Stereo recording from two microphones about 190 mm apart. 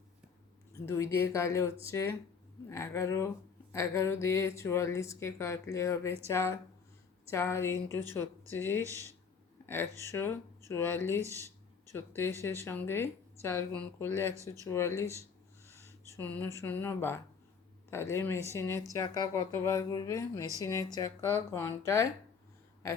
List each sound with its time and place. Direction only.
0.7 s speech: 15° left (ahead or behind)
10.1 s speech: 10° left (ahead or behind)
15.8 s a sound: 15° right (ahead or behind)
16.1 s speech: 10° left (ahead or behind)